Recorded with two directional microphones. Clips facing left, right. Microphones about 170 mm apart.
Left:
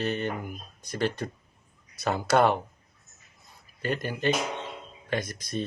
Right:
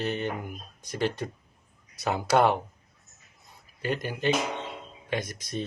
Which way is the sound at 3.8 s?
15° right (ahead or behind).